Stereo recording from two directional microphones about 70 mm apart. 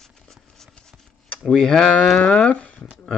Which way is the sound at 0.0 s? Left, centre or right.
Centre.